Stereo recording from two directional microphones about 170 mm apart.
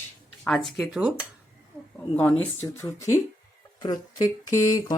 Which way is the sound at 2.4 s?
15° left (ahead or behind).